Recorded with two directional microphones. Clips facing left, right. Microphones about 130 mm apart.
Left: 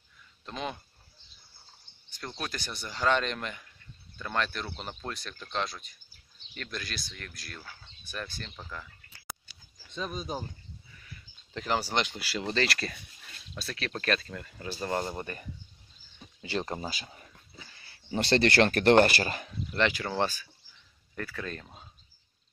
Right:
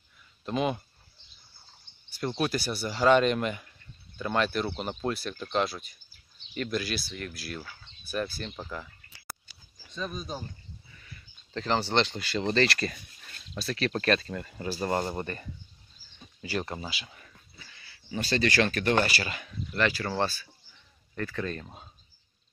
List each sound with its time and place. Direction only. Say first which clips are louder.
0.5 s speech: right 8 dB; 10° right (ahead or behind)
2.0 s speech: right 9 dB; 10° right (ahead or behind)
9.9 s speech: left 1 dB; 20° left (ahead or behind)
11.5 s speech: right 3 dB; 10° left (ahead or behind)
16.6 s speech: left 2 dB; 35° left (ahead or behind)
18.2 s speech: left 3 dB; 60° left (ahead or behind); by 19.4 s 45° left (ahead or behind)
19.4 s speech: right 2 dB; 25° left (ahead or behind)
21.1 s speech: right 4 dB; centre (ahead or behind)